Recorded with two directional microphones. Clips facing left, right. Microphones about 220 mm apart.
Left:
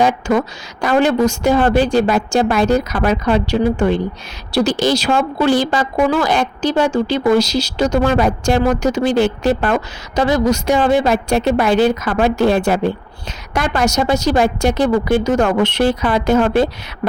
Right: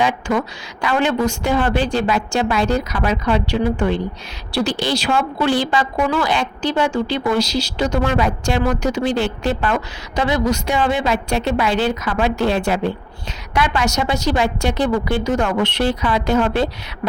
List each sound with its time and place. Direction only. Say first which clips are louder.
0.0 s a woman's voice: left 4 dB; 45° left (ahead or behind)
17.0 s beatboxing: left 3 dB; 35° left (ahead or behind)